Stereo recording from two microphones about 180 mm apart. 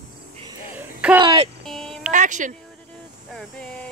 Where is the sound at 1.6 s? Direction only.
Centre (ahead or behind).